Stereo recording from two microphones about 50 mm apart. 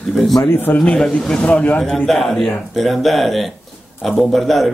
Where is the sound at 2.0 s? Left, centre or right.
Centre.